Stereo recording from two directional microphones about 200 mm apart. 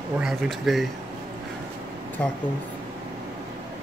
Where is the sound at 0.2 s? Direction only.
Centre (ahead or behind).